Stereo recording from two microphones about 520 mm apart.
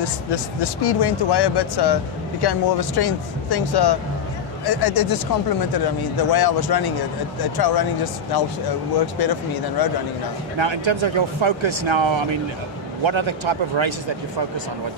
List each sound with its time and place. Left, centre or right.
0.0 s speech: left
10.6 s speech: right